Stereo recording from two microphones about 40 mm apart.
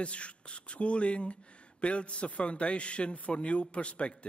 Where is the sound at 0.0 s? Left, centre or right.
Left.